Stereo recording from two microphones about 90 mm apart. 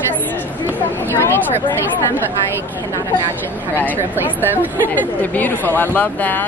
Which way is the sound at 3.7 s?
20° left (ahead or behind).